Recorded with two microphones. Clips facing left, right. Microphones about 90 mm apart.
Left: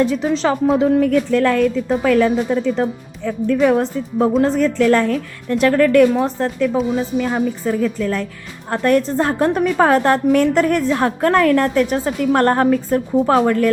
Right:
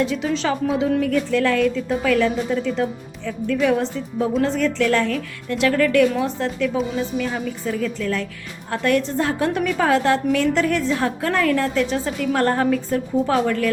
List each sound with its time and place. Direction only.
0.0 s a woman's voice: 40° left (ahead or behind)